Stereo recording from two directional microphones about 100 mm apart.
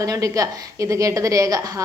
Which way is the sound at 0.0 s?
35° right (ahead or behind).